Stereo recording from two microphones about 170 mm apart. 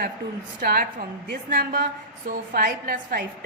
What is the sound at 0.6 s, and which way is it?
A woman's voice, 65° right (ahead or behind).